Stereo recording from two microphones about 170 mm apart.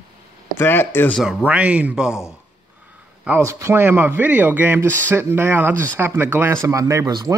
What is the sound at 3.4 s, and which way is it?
Speech, 15° right (ahead or behind).